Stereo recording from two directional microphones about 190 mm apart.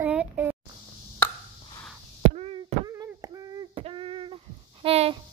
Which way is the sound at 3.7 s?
30° right (ahead or behind).